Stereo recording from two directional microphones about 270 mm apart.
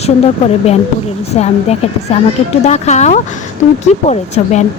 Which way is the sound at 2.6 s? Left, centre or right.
Left.